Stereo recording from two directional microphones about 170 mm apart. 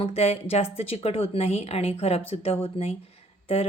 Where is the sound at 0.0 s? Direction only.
35° left (ahead or behind).